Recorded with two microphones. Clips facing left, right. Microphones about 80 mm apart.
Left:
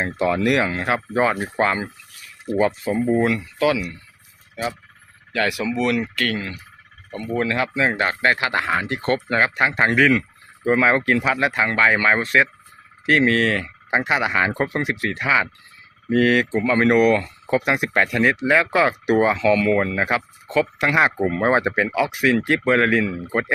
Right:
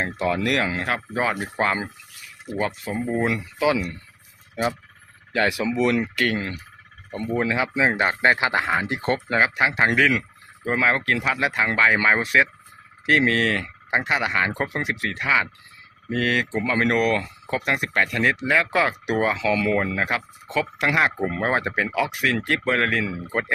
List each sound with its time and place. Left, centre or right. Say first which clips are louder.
0.0 s speech: left 3 dB; centre
3.2 s speech: left 2 dB; centre
5.3 s speech: even; right; by 23.5 s centre